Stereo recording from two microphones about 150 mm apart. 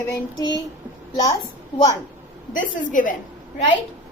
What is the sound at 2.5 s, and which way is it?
Speech, 60° left (ahead or behind).